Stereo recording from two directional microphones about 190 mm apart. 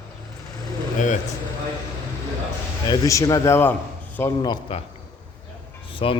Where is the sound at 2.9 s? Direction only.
15° left (ahead or behind).